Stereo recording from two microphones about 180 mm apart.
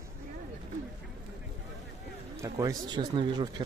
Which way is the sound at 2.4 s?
20° right (ahead or behind).